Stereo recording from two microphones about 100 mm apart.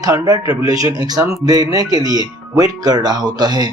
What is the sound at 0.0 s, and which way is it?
Speech, 40° right (ahead or behind).